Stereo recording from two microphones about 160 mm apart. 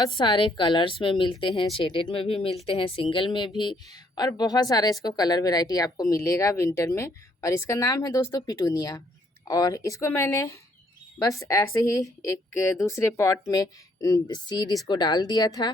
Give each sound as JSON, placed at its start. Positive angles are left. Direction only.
{"t": 0.2, "sound": "a woman's voice", "side_deg": 30}